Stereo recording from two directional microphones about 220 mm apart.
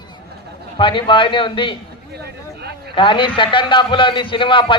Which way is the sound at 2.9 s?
20° left (ahead or behind).